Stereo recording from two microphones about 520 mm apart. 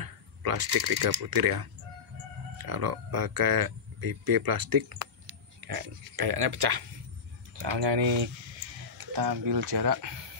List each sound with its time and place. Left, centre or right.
0.0 s speech: right